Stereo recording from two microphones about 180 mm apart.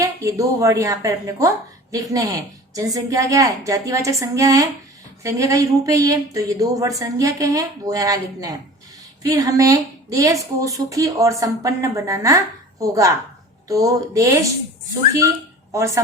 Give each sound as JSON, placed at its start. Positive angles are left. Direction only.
{"t": 0.0, "sound": "a woman's voice", "side_deg": -15}